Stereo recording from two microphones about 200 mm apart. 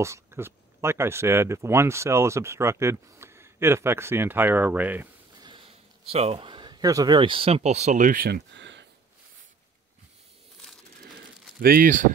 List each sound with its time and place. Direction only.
0.0 s speech: 15° right (ahead or behind)
5.4 s speech: 25° right (ahead or behind); by 8.8 s 60° right (ahead or behind)
11.6 s speech: 45° right (ahead or behind)